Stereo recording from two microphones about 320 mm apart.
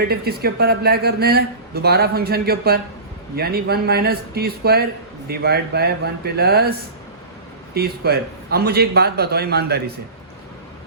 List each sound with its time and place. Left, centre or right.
0.1 s speech: right